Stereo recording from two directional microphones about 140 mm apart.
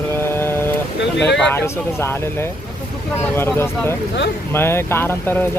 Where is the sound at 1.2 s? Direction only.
5° left (ahead or behind).